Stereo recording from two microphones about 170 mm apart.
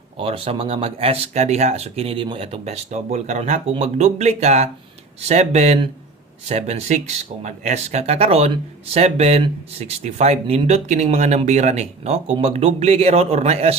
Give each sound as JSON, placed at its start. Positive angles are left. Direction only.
{"t": 0.2, "sound": "speech", "side_deg": -30}